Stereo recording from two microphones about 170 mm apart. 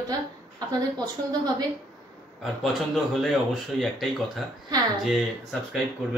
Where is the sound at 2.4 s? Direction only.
Centre (ahead or behind).